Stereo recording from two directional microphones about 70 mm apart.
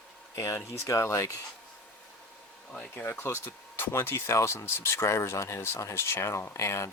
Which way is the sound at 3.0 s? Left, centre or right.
Left.